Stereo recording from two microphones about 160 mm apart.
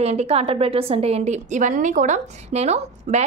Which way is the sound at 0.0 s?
40° right (ahead or behind).